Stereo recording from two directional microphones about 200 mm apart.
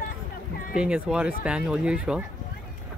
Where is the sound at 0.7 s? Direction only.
5° right (ahead or behind).